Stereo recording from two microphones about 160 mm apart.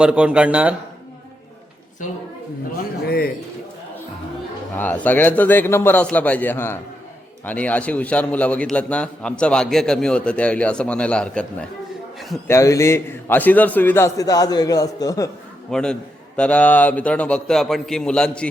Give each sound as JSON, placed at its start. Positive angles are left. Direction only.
{"t": 0.0, "sound": "speech", "side_deg": -5}
{"t": 4.8, "sound": "a man's voice", "side_deg": 10}
{"t": 12.5, "sound": "a man's voice", "side_deg": 20}
{"t": 15.7, "sound": "a man's voice", "side_deg": 5}